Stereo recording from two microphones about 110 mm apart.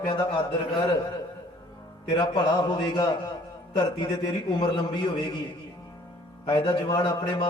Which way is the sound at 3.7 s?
45° left (ahead or behind).